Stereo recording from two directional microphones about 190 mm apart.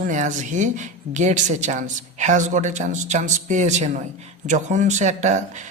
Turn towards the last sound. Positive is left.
turn(degrees=-40)  # may be behind; listen again after turning